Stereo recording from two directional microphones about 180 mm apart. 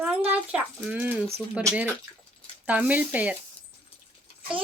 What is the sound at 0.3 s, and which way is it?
A woman's voice, 5° right (ahead or behind).